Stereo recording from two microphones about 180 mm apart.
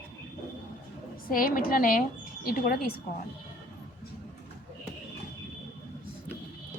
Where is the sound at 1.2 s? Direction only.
50° left (ahead or behind).